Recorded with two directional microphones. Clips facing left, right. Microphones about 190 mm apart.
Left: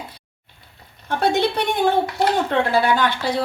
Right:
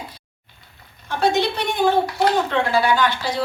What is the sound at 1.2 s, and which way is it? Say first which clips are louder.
A woman's voice: even; 55° left (ahead or behind).